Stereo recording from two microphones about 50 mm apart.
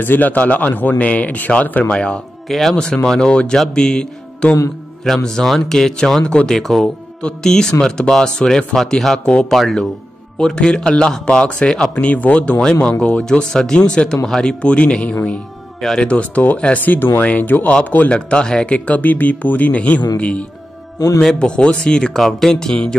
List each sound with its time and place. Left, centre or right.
0.0 s speech: left
2.4 s a man's voice: centre
7.2 s speech: centre
10.4 s speech: centre
14.6 s speech: left
16.8 s speech: left
18.1 s speech: centre
18.9 s speech: left
21.2 s speech: centre